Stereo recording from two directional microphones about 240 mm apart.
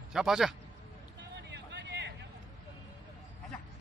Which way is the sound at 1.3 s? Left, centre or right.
Right.